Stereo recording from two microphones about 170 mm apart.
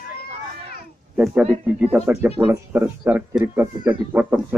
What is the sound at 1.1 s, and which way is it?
Speech, 5° right (ahead or behind).